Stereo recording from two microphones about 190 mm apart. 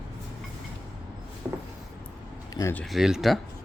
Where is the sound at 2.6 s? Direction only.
15° left (ahead or behind).